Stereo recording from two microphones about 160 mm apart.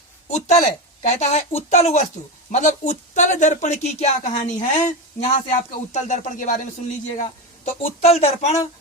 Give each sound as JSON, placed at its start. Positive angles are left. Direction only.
{"t": 0.3, "sound": "speech", "side_deg": 45}
{"t": 7.2, "sound": "speech", "side_deg": 40}